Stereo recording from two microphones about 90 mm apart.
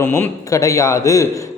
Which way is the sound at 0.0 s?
30° left (ahead or behind).